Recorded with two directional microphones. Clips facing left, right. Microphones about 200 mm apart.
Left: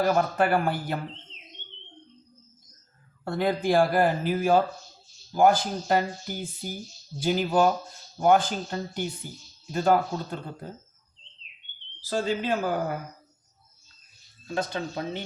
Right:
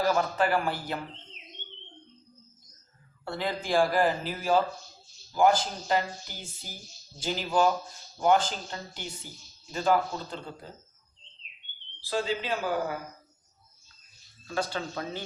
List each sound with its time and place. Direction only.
0.0 s speech: 55° left (ahead or behind)
3.2 s speech: 50° left (ahead or behind)
5.3 s speech: 55° left (ahead or behind)
12.0 s speech: 45° left (ahead or behind)
14.4 s speech: 20° left (ahead or behind)